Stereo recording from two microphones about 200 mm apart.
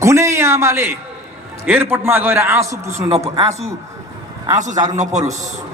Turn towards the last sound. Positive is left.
turn(degrees=-35)  # may be behind; listen again after turning